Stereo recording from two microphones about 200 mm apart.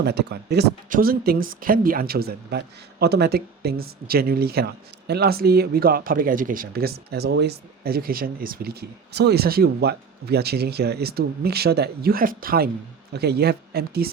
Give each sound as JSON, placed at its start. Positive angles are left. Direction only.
{"t": 0.0, "sound": "speech", "side_deg": -55}